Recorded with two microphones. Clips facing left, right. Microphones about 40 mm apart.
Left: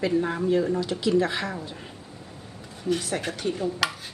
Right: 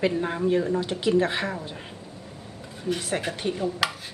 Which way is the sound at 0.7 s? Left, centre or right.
Right.